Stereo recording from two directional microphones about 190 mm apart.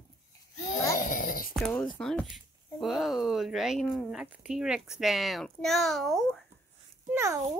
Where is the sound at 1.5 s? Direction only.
Centre (ahead or behind).